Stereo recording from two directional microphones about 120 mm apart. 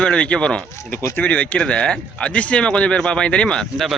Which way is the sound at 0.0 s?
10° left (ahead or behind).